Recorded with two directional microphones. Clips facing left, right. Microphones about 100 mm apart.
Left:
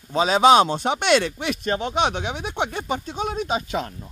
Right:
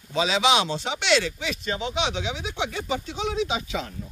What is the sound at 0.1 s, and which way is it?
Speech, 45° left (ahead or behind).